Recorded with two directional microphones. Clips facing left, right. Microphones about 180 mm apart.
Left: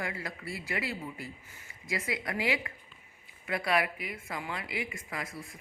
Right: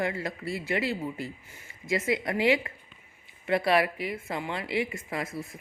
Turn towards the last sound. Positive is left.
turn(degrees=-25)  # may be behind; listen again after turning